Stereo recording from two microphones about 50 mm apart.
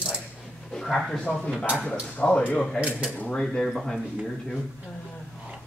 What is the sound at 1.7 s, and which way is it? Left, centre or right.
Speech, left.